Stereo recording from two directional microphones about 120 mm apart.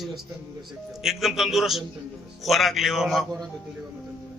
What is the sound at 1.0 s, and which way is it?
A man's voice, centre (ahead or behind).